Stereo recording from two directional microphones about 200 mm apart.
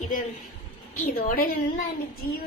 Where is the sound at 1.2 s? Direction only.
45° left (ahead or behind).